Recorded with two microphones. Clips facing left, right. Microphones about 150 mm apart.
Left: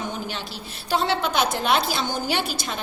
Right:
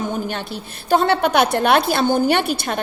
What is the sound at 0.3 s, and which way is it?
A woman's voice, 55° right (ahead or behind).